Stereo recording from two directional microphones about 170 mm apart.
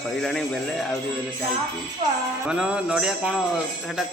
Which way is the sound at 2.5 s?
5° right (ahead or behind).